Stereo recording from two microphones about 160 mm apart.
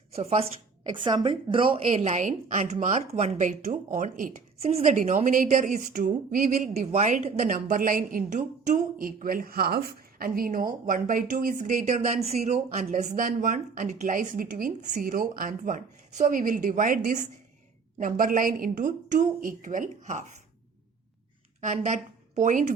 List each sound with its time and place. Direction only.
0.1 s a woman's voice: 40° right (ahead or behind)
0.9 s a woman's voice: 30° right (ahead or behind)
2.0 s a woman's voice: 50° right (ahead or behind)
4.6 s a woman's voice: 40° right (ahead or behind)
7.5 s speech: 55° right (ahead or behind)
21.6 s a woman's voice: 50° right (ahead or behind)